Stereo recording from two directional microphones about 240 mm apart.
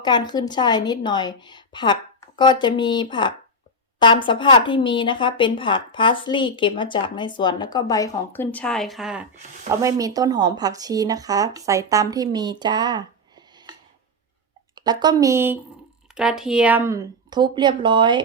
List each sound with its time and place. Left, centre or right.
0.0 s speech: centre
9.8 s speech: centre
14.8 s speech: centre